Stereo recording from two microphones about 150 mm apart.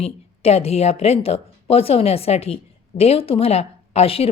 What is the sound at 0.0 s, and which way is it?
A woman's voice, 40° left (ahead or behind).